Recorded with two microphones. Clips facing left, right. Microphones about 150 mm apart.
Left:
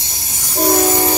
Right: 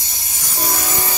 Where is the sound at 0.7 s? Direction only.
45° left (ahead or behind).